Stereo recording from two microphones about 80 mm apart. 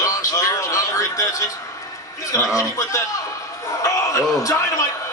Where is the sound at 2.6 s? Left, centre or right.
Left.